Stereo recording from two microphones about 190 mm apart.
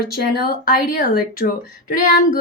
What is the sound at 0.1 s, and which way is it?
Speech, 55° left (ahead or behind).